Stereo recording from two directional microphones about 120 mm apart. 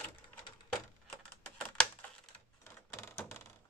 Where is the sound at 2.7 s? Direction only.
25° left (ahead or behind).